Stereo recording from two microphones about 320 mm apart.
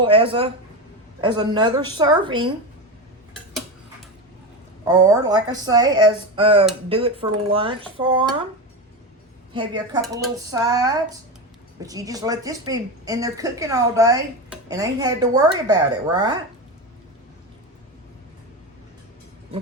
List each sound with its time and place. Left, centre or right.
0.0 s speech: centre
4.9 s speech: centre
9.5 s speech: centre